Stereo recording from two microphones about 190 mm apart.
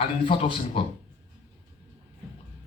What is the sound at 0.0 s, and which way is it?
Speech, 30° left (ahead or behind).